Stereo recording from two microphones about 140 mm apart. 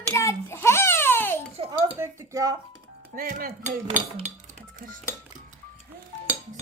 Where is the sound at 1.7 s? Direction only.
25° right (ahead or behind).